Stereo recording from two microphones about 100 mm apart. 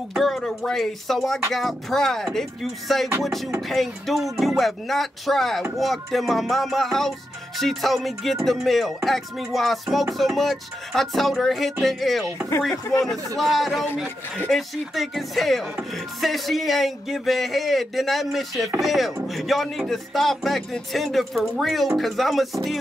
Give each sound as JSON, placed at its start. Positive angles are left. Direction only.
{"t": 0.1, "sound": "speech", "side_deg": 0}
{"t": 12.7, "sound": "speech", "side_deg": 30}
{"t": 13.4, "sound": "speech", "side_deg": 0}